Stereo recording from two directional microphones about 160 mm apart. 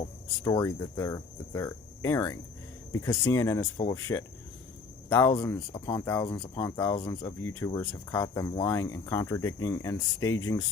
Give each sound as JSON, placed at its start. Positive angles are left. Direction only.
{"t": 0.4, "sound": "speech", "side_deg": 20}